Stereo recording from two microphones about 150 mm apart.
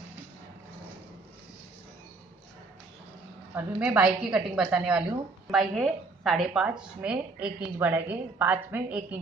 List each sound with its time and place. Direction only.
3.5 s a woman's voice: 10° right (ahead or behind)